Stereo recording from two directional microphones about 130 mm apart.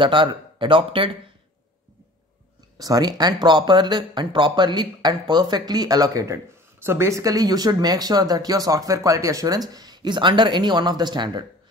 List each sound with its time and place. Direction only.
0.0 s speech: 40° right (ahead or behind)
2.8 s speech: 30° right (ahead or behind)